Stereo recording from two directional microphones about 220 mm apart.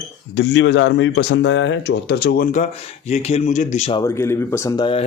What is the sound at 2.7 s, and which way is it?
Speech, 30° left (ahead or behind).